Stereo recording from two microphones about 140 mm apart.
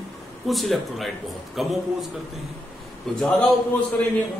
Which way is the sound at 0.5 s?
Centre (ahead or behind).